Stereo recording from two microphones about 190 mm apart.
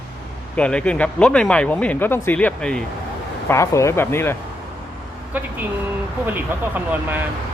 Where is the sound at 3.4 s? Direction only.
15° left (ahead or behind).